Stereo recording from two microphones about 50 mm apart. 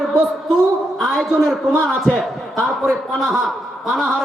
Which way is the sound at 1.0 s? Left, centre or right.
Centre.